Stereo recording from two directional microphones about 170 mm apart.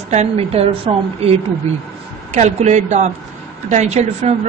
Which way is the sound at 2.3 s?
45° right (ahead or behind).